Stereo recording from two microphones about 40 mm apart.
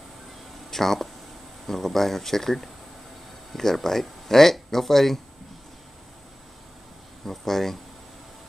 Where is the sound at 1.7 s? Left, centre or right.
Centre.